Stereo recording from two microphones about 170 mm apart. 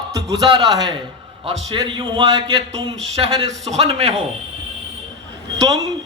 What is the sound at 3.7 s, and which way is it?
Speech, 40° right (ahead or behind).